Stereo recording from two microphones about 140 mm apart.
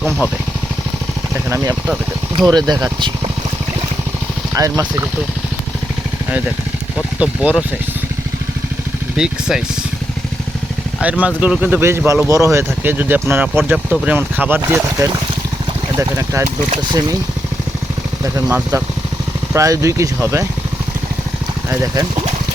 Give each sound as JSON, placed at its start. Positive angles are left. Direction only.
{"t": 1.5, "sound": "speech", "side_deg": -20}
{"t": 2.5, "sound": "speech", "side_deg": -30}
{"t": 4.6, "sound": "speech", "side_deg": -20}
{"t": 7.2, "sound": "speech", "side_deg": -10}
{"t": 9.1, "sound": "speech", "side_deg": -5}
{"t": 11.0, "sound": "speech", "side_deg": -10}
{"t": 18.2, "sound": "speech", "side_deg": -25}